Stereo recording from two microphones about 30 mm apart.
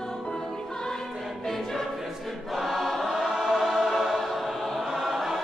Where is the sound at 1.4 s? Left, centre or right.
Centre.